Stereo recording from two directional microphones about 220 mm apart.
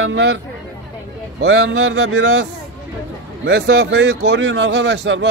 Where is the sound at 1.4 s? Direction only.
55° right (ahead or behind).